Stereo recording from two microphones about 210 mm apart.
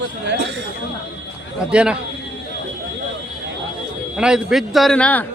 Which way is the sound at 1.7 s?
5° right (ahead or behind).